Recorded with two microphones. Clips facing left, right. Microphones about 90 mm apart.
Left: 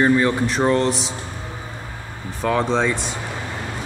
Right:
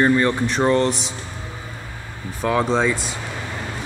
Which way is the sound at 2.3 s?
5° right (ahead or behind).